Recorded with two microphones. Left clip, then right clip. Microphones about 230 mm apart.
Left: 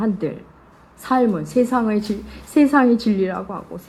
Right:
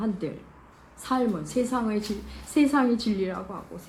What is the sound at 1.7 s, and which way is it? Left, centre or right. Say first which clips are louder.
Speech: left 8 dB; left.